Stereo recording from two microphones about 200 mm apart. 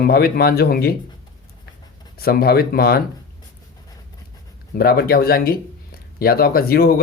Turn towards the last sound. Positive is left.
turn(degrees=50)  # may be behind; listen again after turning